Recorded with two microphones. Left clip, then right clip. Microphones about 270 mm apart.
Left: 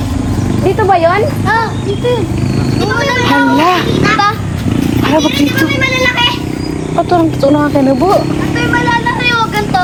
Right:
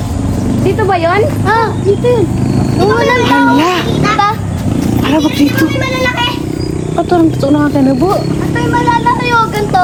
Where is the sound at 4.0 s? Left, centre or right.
Right.